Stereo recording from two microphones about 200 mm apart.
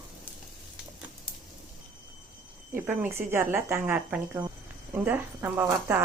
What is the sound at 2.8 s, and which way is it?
Speech, 10° right (ahead or behind).